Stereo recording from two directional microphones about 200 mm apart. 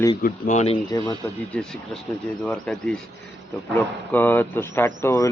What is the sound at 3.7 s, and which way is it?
Speech, 10° left (ahead or behind).